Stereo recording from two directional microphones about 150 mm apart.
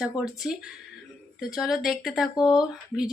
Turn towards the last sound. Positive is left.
turn(degrees=-5)  # may be behind; listen again after turning